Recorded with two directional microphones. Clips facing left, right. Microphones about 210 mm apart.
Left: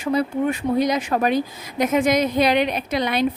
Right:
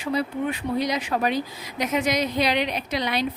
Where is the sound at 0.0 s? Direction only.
50° left (ahead or behind).